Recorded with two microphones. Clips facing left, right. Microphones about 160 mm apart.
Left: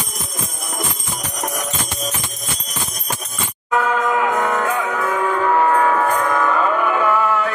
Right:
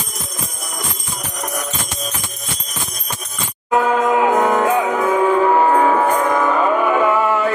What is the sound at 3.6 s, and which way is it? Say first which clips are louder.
Music: right 3 dB; 25° right (ahead or behind).